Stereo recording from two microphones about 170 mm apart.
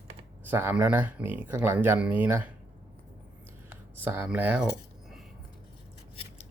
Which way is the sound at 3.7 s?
10° right (ahead or behind).